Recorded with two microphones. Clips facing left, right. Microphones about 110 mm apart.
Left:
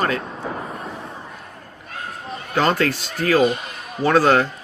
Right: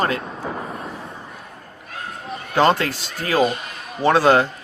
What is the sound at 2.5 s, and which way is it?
A man's voice, 30° right (ahead or behind).